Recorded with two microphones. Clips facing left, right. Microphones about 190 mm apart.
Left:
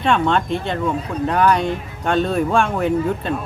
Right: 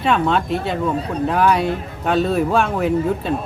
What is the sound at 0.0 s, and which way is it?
Speech, 5° right (ahead or behind).